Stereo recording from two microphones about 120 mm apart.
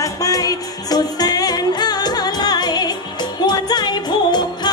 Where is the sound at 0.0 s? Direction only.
30° left (ahead or behind).